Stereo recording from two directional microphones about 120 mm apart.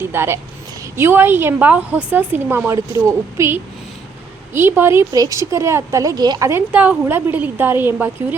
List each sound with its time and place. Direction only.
0.0 s a woman's voice: 20° right (ahead or behind)
5.1 s a woman's voice: 30° right (ahead or behind)
6.7 s a woman's voice: 15° right (ahead or behind)